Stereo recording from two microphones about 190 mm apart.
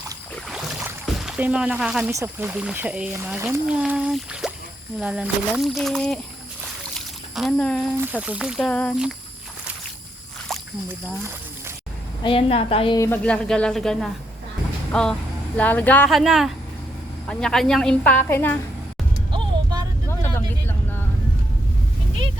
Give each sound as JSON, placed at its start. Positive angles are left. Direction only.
{"t": 0.8, "sound": "rowboat", "side_deg": -5}
{"t": 2.1, "sound": "a woman's voice", "side_deg": -10}
{"t": 6.9, "sound": "a sound", "side_deg": 0}
{"t": 8.0, "sound": "a woman's voice", "side_deg": -10}
{"t": 10.5, "sound": "a sound", "side_deg": 0}
{"t": 12.2, "sound": "a woman's voice", "side_deg": 30}
{"t": 13.0, "sound": "a woman's voice", "side_deg": 10}
{"t": 16.0, "sound": "a woman's voice", "side_deg": 0}
{"t": 19.3, "sound": "music", "side_deg": -25}
{"t": 20.1, "sound": "vehicle", "side_deg": 10}